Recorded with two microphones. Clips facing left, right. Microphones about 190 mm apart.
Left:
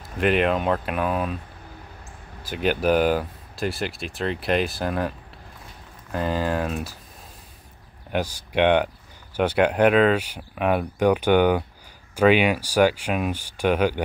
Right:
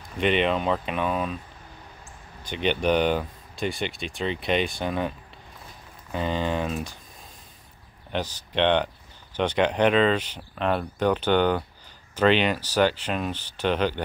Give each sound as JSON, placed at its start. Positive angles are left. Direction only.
{"t": 0.2, "sound": "speech", "side_deg": 5}
{"t": 2.4, "sound": "speech", "side_deg": 5}
{"t": 6.1, "sound": "speech", "side_deg": 5}
{"t": 8.1, "sound": "speech", "side_deg": 10}